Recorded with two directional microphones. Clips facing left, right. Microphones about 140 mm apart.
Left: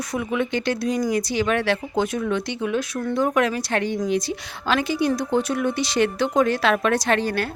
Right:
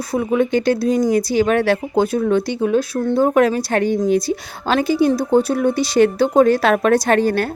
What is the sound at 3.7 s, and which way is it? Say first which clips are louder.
Speech: right 6 dB; 45° right (ahead or behind).